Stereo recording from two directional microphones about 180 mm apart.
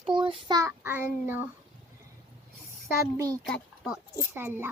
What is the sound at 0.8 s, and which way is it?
Speech, 10° right (ahead or behind).